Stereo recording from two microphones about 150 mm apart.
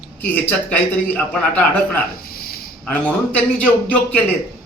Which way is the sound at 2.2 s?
85° left.